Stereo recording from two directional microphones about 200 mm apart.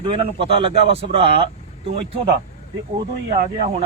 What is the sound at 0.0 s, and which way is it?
A man's voice, 25° right (ahead or behind).